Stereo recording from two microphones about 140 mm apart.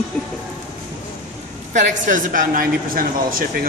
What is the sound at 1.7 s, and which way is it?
A woman's voice, 65° right (ahead or behind).